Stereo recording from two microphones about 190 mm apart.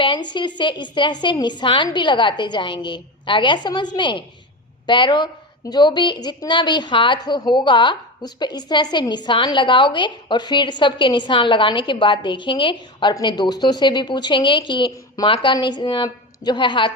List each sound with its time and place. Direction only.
0.0 s a woman's voice: 25° left (ahead or behind)